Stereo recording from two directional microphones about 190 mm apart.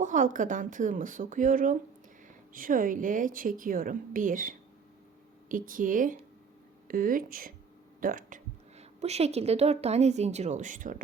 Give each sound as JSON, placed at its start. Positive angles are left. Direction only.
{"t": 0.0, "sound": "a woman's voice", "side_deg": -40}
{"t": 8.8, "sound": "a woman's voice", "side_deg": -35}